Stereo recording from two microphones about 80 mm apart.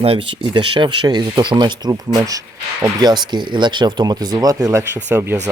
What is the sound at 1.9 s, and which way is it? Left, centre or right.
Speech, right.